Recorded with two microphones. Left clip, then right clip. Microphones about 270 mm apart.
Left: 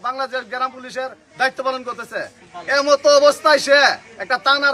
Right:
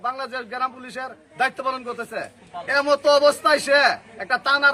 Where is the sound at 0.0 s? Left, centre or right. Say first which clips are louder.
Left 4 dB; centre.